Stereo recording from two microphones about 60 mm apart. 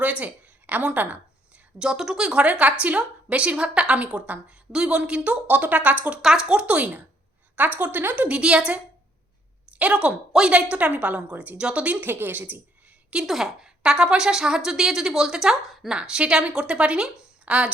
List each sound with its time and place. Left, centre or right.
0.0 s a woman's voice: right
1.8 s a woman's voice: centre; by 6.1 s right
6.2 s a woman's voice: centre; by 8.3 s right
8.3 s a woman's voice: centre
11.9 s a woman's voice: right
13.2 s a woman's voice: centre